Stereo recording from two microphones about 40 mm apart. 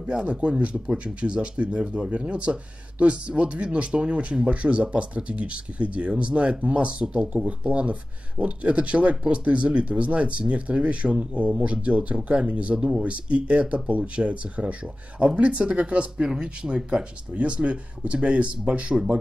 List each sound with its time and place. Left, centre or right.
0.2 s speech: right
12.7 s speech: centre
13.0 s speech: right